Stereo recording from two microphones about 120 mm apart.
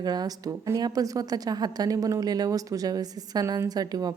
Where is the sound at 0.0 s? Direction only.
35° right (ahead or behind).